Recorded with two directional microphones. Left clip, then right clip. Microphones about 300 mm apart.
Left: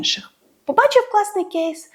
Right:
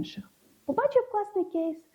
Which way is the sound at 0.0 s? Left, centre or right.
Centre.